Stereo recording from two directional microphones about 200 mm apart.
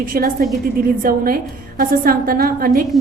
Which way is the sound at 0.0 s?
45° right (ahead or behind).